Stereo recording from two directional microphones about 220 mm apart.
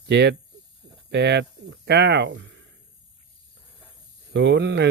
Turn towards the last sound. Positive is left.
turn(degrees=-50)  # may be behind; listen again after turning